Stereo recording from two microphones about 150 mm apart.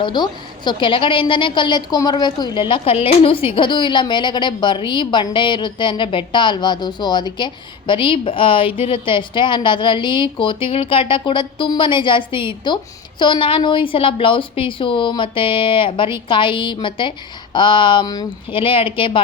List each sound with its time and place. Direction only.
0.0 s a woman's voice: 30° left (ahead or behind)